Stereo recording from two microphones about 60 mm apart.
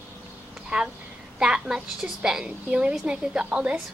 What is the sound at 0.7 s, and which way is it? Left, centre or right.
A woman's voice, centre.